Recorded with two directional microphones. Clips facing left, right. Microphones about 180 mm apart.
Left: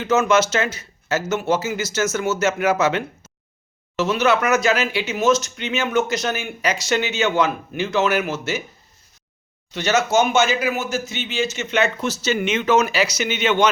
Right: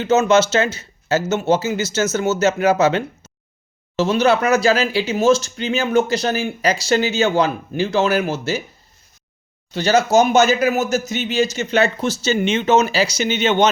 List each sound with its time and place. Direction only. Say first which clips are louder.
0.0 s speech: right 3 dB; 30° right (ahead or behind)
9.7 s speech: right 4 dB; 35° right (ahead or behind)